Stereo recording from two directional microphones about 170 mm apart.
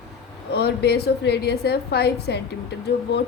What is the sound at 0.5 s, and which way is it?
Speech, 70° left (ahead or behind).